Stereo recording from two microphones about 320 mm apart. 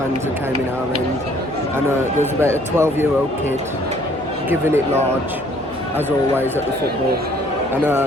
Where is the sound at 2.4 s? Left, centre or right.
Centre.